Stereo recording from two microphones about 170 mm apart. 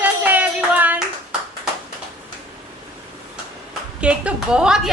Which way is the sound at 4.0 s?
5° right (ahead or behind).